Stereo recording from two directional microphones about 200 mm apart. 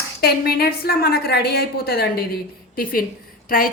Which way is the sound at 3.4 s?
45° left (ahead or behind).